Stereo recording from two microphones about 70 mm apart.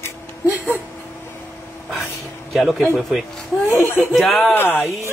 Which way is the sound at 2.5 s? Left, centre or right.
Centre.